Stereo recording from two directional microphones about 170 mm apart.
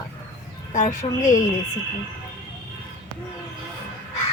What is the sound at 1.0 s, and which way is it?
Speech, 35° left (ahead or behind).